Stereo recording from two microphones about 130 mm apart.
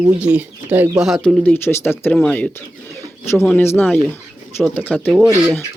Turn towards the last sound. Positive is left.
turn(degrees=-5)  # may be behind; listen again after turning